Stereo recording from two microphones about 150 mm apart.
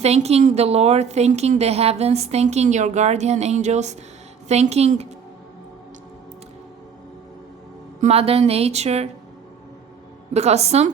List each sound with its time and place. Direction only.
0.0 s a woman's voice: 45° right (ahead or behind)
8.0 s a woman's voice: 40° right (ahead or behind)
10.3 s a woman's voice: 45° right (ahead or behind)